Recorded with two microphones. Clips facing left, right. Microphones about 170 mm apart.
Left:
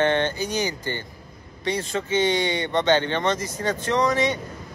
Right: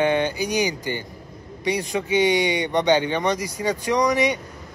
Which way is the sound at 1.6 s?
15° right (ahead or behind).